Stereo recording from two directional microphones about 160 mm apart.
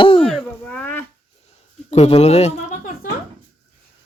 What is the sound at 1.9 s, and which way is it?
Speech, 40° left (ahead or behind).